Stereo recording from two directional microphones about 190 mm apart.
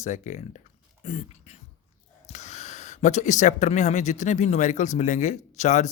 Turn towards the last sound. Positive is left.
turn(degrees=40)  # may be behind; listen again after turning